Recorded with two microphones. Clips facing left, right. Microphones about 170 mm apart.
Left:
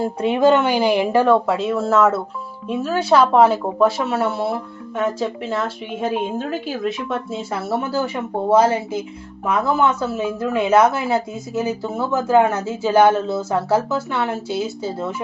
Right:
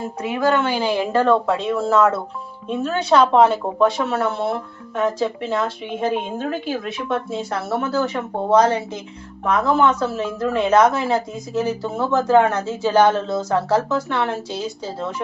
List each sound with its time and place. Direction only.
0.0 s speech: 30° left (ahead or behind); by 15.1 s 5° left (ahead or behind)